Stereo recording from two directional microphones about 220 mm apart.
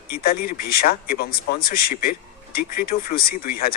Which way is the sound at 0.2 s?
40° left (ahead or behind).